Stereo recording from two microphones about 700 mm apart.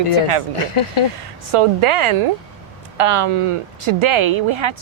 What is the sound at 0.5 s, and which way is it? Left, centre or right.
Speech, left.